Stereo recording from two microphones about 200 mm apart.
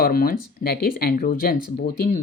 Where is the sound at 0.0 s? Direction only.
45° left (ahead or behind).